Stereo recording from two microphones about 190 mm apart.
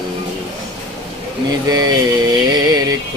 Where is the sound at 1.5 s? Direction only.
20° right (ahead or behind).